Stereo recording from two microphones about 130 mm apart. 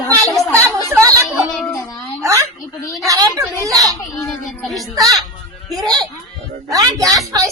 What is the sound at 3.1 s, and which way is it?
Speech, 25° right (ahead or behind).